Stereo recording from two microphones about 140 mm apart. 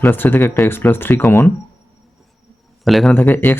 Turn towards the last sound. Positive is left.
turn(degrees=15)  # may be behind; listen again after turning